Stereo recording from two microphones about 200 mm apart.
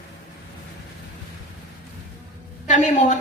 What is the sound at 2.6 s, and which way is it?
Speech, 35° left (ahead or behind).